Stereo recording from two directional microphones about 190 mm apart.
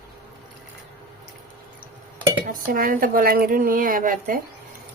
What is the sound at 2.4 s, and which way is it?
Speech, 45° right (ahead or behind).